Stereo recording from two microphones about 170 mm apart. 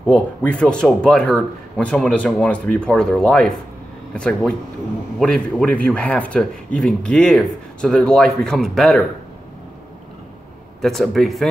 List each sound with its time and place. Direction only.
0.0 s speech: 5° left (ahead or behind)
10.8 s speech: centre (ahead or behind)